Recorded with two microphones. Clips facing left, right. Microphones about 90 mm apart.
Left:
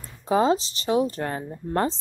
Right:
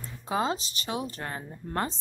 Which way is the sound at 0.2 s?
30° left (ahead or behind).